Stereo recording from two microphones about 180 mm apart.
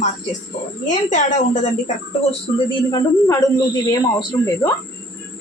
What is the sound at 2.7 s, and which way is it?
Speech, 25° left (ahead or behind).